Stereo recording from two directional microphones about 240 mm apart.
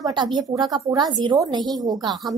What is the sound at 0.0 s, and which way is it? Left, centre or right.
Speech, centre.